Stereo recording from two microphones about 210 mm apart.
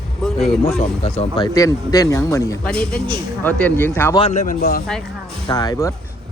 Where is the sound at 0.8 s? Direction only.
30° left (ahead or behind); by 2.7 s 15° left (ahead or behind).